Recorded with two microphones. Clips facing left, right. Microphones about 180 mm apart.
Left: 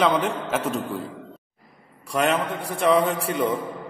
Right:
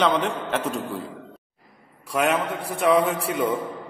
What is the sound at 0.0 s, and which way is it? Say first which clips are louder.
A man's voice: left 1 dB; 5° left (ahead or behind).